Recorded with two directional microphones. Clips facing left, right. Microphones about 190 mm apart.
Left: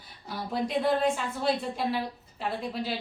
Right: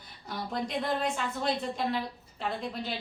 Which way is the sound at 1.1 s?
5° left (ahead or behind).